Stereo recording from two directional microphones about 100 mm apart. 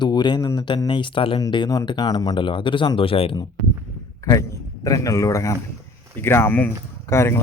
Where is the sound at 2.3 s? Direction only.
55° left (ahead or behind).